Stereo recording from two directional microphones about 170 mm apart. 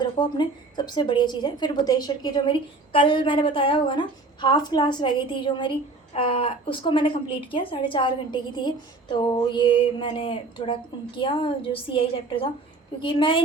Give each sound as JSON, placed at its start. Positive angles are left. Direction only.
{"t": 0.0, "sound": "a woman's voice", "side_deg": 25}